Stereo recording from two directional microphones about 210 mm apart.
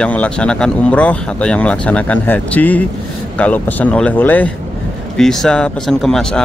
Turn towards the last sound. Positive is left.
turn(degrees=0)  # may be behind; listen again after turning